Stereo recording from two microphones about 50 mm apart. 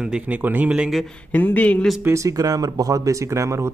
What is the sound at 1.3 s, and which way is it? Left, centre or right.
Speech, left.